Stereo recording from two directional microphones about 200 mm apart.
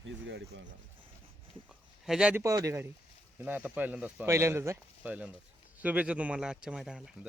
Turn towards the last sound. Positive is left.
turn(degrees=-5)  # may be behind; listen again after turning